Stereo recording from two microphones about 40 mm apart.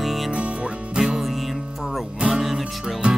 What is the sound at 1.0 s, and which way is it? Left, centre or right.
Music, centre.